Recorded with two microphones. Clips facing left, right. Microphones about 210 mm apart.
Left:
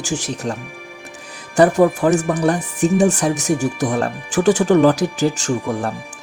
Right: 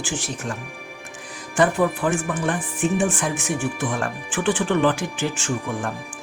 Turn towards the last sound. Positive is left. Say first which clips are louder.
# left 5 dB
turn(degrees=40)  # may be behind; listen again after turning